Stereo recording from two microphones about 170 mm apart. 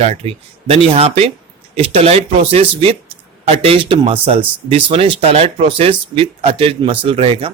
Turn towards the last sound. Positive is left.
turn(degrees=-35)  # may be behind; listen again after turning